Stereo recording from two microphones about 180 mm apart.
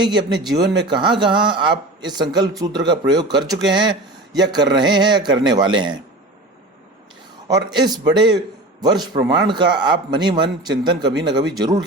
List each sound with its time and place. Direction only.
0.0 s speech: 25° right (ahead or behind)
7.4 s speech: 20° right (ahead or behind)